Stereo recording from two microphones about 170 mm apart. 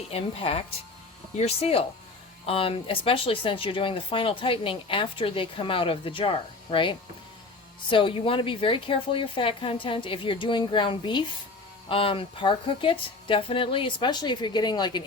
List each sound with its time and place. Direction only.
0.1 s a woman's voice: 35° left (ahead or behind)